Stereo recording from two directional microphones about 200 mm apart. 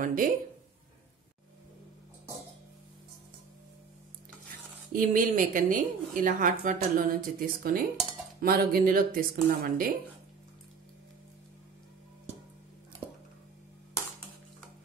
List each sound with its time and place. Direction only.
0.0 s a woman's voice: 45° right (ahead or behind)
4.9 s a woman's voice: 45° right (ahead or behind)